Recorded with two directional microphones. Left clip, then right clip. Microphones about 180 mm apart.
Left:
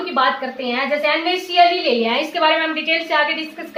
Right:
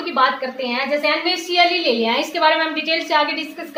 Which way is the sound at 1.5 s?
30° right (ahead or behind).